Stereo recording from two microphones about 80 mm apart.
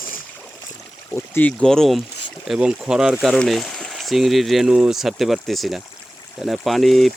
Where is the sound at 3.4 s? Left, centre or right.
Centre.